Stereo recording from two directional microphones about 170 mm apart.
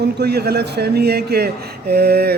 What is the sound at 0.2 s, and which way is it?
A man's voice, 70° right (ahead or behind).